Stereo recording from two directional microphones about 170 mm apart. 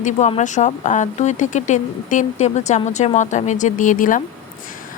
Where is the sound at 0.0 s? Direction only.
40° left (ahead or behind).